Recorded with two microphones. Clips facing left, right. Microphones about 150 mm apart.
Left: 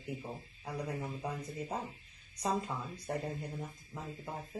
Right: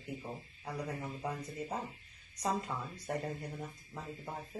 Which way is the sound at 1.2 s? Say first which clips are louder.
Even; 20° left (ahead or behind).